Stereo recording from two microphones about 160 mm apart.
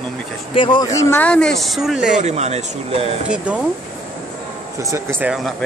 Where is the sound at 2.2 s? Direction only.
45° right (ahead or behind).